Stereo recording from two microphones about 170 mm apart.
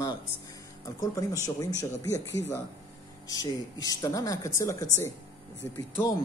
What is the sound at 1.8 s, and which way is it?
Speech, 20° left (ahead or behind).